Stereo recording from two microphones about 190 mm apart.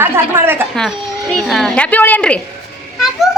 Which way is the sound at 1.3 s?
Centre (ahead or behind).